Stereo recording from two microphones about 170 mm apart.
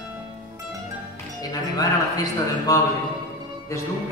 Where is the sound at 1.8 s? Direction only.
20° left (ahead or behind).